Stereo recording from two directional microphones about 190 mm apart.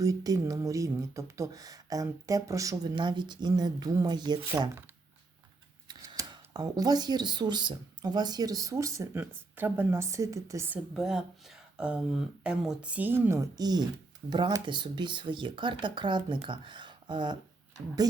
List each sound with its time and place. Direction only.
0.0 s speech: 20° right (ahead or behind)
5.9 s speech: 20° right (ahead or behind)
10.9 s speech: 5° right (ahead or behind); by 18.2 s 20° right (ahead or behind)